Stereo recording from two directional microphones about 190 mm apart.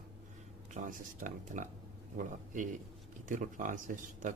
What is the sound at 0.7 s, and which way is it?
Speech, 45° right (ahead or behind).